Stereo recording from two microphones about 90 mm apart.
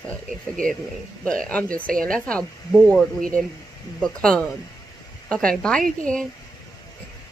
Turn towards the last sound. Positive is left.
turn(degrees=10)  # may be behind; listen again after turning